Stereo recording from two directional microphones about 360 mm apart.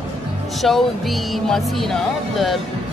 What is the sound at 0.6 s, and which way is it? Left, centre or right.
Speech, centre.